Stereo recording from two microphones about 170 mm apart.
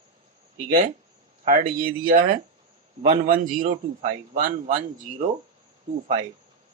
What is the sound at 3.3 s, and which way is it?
Speech, 50° right (ahead or behind).